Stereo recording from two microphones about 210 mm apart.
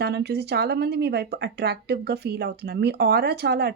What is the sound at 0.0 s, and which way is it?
A woman's voice, 50° right (ahead or behind).